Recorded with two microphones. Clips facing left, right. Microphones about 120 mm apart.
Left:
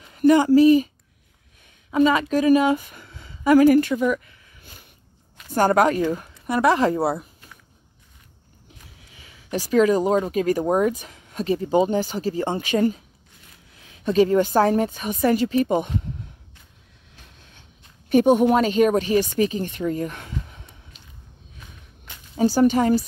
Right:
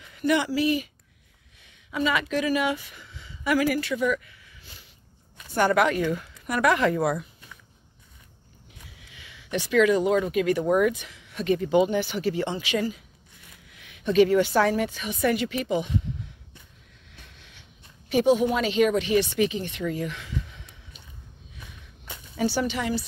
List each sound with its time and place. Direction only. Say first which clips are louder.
0.2 s a woman's voice: left 9 dB; 45° left (ahead or behind)
9.0 s speech: even; 35° left (ahead or behind)
12.4 s a woman's voice: left 6 dB; 50° left (ahead or behind)
17.4 s speech: left 1 dB; 45° left (ahead or behind)
22.4 s a woman's voice: left 8 dB; 40° left (ahead or behind)